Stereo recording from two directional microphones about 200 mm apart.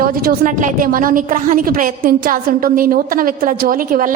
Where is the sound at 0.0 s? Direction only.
45° right (ahead or behind).